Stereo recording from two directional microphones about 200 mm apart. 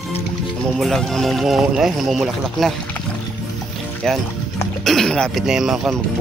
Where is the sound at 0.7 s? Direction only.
Centre (ahead or behind).